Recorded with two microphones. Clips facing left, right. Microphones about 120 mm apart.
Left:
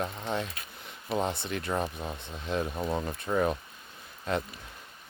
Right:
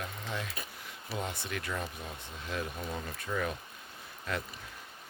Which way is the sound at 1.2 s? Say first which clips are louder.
Left 6 dB; 30° left (ahead or behind).